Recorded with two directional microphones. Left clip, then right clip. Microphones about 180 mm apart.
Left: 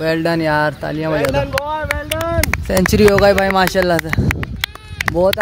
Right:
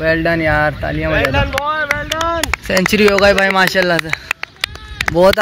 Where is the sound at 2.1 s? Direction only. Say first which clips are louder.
Even; 30° left (ahead or behind).